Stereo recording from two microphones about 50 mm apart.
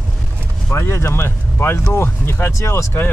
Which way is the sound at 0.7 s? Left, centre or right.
Left.